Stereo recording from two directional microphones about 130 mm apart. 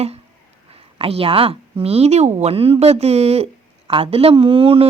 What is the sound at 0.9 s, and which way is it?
Speech, 50° right (ahead or behind).